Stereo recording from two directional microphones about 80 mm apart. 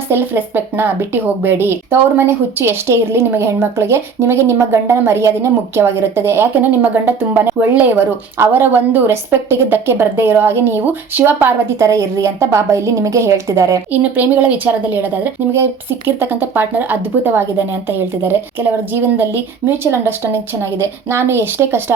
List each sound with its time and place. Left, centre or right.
0.1 s speech: right
7.9 s speech: right
11.8 s speech: right
13.9 s speech: right